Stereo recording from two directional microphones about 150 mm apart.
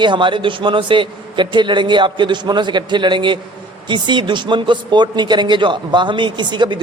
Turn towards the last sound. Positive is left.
turn(degrees=-30)  # may be behind; listen again after turning